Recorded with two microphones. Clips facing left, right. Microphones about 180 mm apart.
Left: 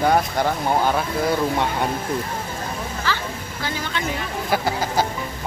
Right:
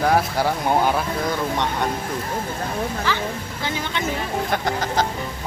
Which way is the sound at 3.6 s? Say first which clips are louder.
Even; 20° right (ahead or behind).